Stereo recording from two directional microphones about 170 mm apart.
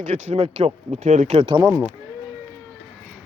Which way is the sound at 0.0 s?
45° right (ahead or behind).